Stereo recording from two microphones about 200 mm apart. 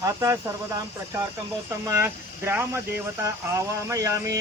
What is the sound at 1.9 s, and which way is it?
Speech, 10° right (ahead or behind).